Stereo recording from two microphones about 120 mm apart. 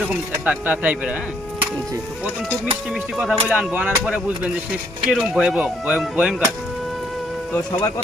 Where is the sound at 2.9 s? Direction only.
5° right (ahead or behind).